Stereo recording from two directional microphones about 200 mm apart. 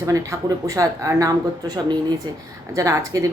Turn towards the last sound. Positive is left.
turn(degrees=-15)  # may be behind; listen again after turning